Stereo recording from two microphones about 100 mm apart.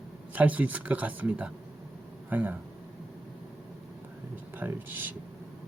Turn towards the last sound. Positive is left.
turn(degrees=-20)  # may be behind; listen again after turning